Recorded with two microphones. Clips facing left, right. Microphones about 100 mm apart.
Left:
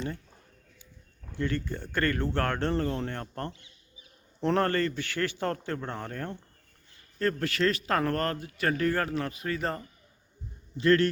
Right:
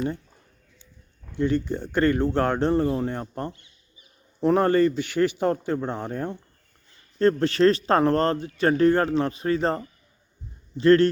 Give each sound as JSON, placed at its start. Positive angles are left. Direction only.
{"t": 1.4, "sound": "speech", "side_deg": -20}
{"t": 7.2, "sound": "speech", "side_deg": -25}